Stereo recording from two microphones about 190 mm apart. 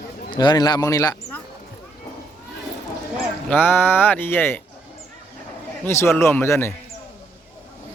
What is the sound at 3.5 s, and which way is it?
Speech, 10° left (ahead or behind).